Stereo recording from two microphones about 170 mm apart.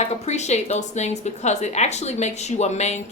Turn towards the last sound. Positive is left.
turn(degrees=40)  # may be behind; listen again after turning